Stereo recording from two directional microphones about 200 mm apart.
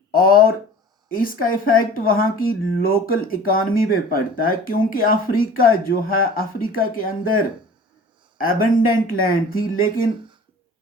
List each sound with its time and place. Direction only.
0.1 s speech: 45° left (ahead or behind)
8.4 s speech: 45° left (ahead or behind)